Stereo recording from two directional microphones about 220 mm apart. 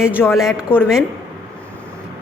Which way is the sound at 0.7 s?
10° left (ahead or behind).